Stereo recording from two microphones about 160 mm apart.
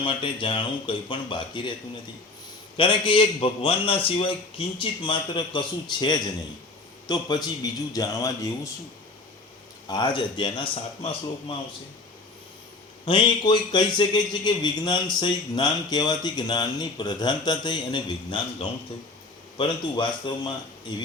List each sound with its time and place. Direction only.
0.0 s a man's voice: 30° left (ahead or behind)
2.7 s a man's voice: 30° left (ahead or behind)
9.9 s a man's voice: 30° left (ahead or behind)
13.1 s a man's voice: 30° left (ahead or behind)